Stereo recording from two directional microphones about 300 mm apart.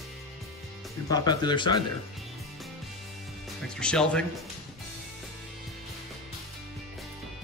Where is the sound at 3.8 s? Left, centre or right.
Centre.